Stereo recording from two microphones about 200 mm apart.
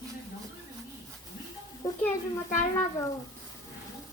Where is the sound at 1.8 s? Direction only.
20° left (ahead or behind).